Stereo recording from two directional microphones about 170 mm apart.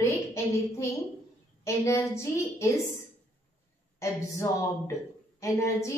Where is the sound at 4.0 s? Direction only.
15° left (ahead or behind).